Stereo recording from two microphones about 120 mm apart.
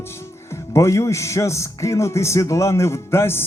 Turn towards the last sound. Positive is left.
turn(degrees=20)  # may be behind; listen again after turning